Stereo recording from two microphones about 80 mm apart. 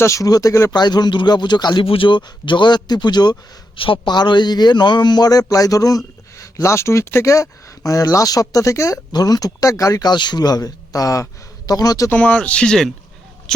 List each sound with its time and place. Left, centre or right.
0.0 s speech: left
0.7 s a man's voice: left
3.8 s a man's voice: left
9.1 s speech: left
12.1 s speech: centre